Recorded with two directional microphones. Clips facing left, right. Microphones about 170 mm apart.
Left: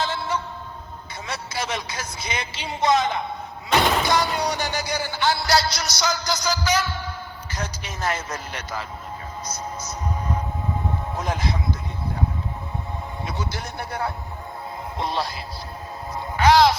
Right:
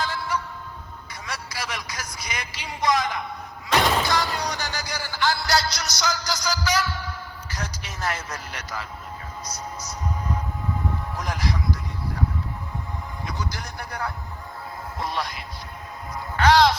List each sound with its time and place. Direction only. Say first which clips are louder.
0.0 s a sound: left 2 dB; 25° left (ahead or behind)
1.3 s a man's voice: left 4 dB; 25° left (ahead or behind)
9.5 s music: left 3 dB; 25° left (ahead or behind)
13.2 s a man's voice: left 2 dB; 25° left (ahead or behind)
16.4 s speech: left 2 dB; 10° left (ahead or behind)